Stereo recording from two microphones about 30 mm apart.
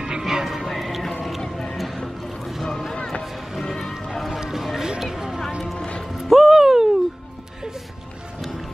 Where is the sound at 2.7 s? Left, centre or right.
Centre.